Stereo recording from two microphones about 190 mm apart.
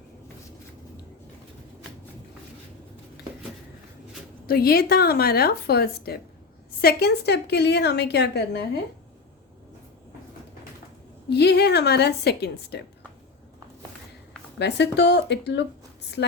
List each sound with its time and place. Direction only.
4.4 s a woman's voice: 55° left (ahead or behind)
11.3 s a woman's voice: 60° left (ahead or behind)
14.6 s a woman's voice: 65° left (ahead or behind)